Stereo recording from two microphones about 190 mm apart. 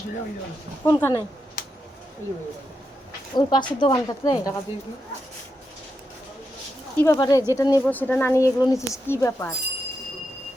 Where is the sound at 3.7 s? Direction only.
25° left (ahead or behind).